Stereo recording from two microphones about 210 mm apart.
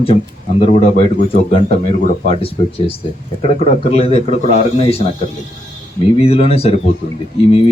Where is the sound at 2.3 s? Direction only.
25° left (ahead or behind).